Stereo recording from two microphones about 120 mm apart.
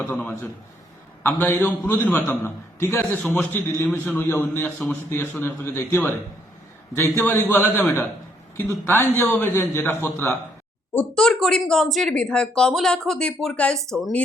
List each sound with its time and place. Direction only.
0.0 s a man's voice: 10° left (ahead or behind)
10.9 s speech: 10° left (ahead or behind)